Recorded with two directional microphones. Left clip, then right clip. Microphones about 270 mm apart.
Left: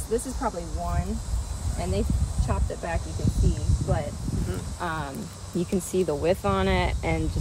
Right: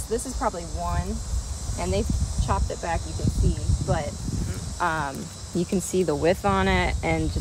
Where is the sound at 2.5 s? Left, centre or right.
Centre.